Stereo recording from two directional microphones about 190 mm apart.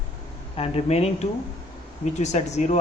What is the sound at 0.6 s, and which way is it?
Speech, 30° left (ahead or behind).